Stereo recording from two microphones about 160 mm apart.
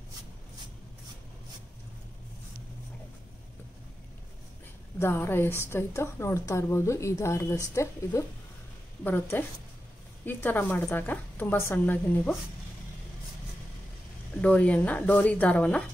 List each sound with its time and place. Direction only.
4.9 s a woman's voice: 15° left (ahead or behind)
14.3 s a woman's voice: 10° left (ahead or behind)